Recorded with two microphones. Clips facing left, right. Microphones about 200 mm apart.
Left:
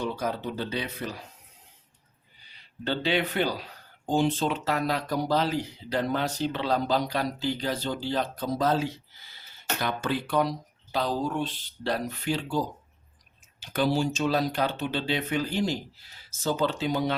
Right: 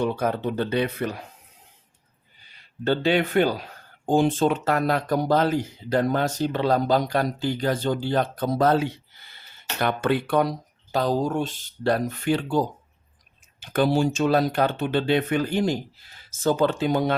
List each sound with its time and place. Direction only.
0.0 s speech: 55° right (ahead or behind)
2.8 s speech: 45° right (ahead or behind)
10.9 s speech: 45° right (ahead or behind)